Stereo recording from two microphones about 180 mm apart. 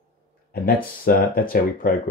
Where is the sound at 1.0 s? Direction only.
55° left (ahead or behind).